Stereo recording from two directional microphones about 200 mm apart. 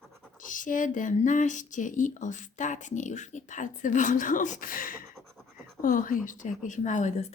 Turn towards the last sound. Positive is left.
turn(degrees=35)  # may be behind; listen again after turning